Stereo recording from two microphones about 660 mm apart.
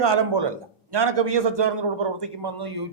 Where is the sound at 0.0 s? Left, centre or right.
Right.